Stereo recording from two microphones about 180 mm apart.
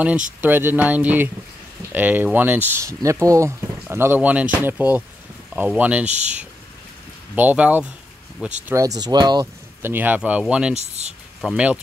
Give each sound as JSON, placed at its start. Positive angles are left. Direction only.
{"t": 0.4, "sound": "speech", "side_deg": -10}
{"t": 6.0, "sound": "speech", "side_deg": -40}
{"t": 7.3, "sound": "speech", "side_deg": -10}
{"t": 8.6, "sound": "speech", "side_deg": -20}
{"t": 10.8, "sound": "speech", "side_deg": -40}
{"t": 11.4, "sound": "speech", "side_deg": -5}